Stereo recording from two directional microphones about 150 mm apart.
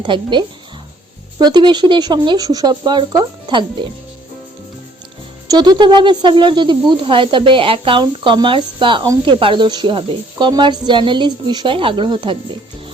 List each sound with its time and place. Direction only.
0.0 s speech: 30° right (ahead or behind)
5.5 s speech: 30° right (ahead or behind)